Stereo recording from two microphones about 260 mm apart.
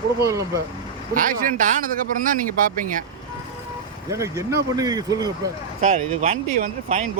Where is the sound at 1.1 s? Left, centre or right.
Right.